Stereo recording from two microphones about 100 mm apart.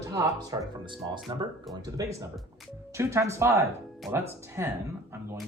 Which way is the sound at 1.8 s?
35° right (ahead or behind).